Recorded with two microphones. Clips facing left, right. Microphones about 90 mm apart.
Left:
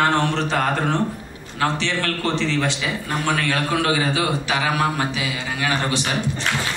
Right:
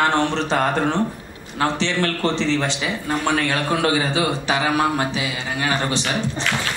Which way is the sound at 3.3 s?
30° right (ahead or behind).